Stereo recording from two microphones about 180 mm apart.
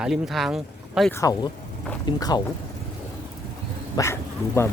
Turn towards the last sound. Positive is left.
turn(degrees=15)  # may be behind; listen again after turning